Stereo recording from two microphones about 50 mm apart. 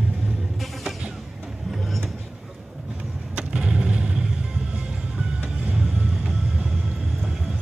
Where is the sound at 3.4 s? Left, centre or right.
Centre.